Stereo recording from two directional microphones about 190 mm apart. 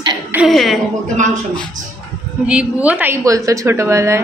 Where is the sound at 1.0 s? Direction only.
40° right (ahead or behind).